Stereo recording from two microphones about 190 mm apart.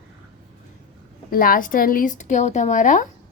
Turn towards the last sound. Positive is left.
turn(degrees=40)  # may be behind; listen again after turning